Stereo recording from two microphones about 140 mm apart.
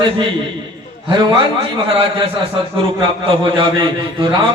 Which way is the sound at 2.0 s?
40° right (ahead or behind).